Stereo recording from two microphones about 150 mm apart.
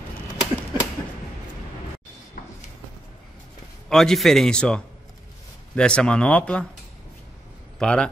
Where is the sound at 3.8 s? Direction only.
Centre (ahead or behind).